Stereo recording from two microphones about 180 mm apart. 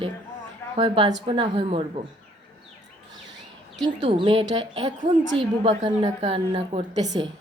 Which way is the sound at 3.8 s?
25° right (ahead or behind).